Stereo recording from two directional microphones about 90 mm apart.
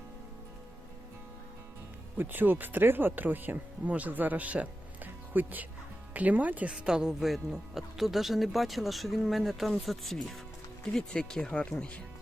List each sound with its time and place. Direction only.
2.1 s speech: 20° right (ahead or behind); by 12.0 s 15° left (ahead or behind)